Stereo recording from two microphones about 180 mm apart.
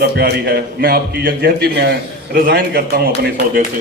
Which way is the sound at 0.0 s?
60° right (ahead or behind).